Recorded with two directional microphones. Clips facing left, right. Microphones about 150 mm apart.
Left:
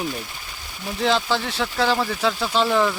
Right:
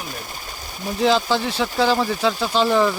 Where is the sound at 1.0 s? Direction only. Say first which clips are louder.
Right 3 dB; centre (ahead or behind).